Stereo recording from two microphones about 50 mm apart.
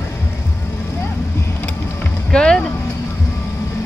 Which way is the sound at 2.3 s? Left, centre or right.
Centre.